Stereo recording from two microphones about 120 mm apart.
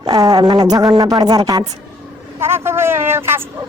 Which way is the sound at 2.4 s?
20° right (ahead or behind).